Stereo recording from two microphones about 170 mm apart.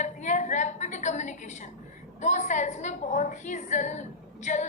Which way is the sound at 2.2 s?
45° left (ahead or behind).